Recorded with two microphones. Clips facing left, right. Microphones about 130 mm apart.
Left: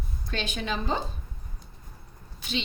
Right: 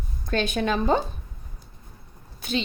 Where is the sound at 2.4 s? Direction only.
50° right (ahead or behind).